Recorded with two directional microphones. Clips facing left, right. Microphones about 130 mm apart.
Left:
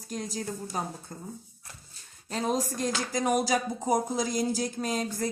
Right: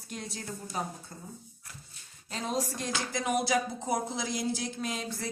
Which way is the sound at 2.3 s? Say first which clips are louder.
Left 4 dB; 45° left (ahead or behind).